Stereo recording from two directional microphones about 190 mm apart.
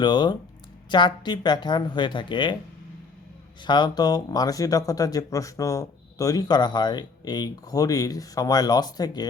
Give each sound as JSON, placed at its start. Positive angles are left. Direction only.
{"t": 0.0, "sound": "speech", "side_deg": 25}
{"t": 3.6, "sound": "speech", "side_deg": 25}